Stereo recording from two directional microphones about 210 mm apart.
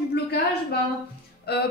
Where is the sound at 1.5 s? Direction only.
50° left (ahead or behind).